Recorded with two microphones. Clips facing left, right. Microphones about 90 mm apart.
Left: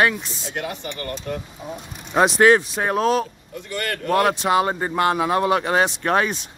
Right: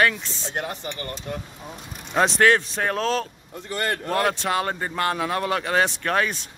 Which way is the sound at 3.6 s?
30° right (ahead or behind).